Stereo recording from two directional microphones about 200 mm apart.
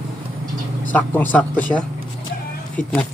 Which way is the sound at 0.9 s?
10° left (ahead or behind).